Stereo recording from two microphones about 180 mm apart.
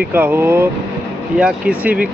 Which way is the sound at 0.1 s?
10° right (ahead or behind).